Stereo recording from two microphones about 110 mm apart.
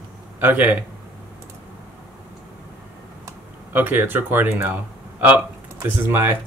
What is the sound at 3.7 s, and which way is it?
Speech, 15° right (ahead or behind).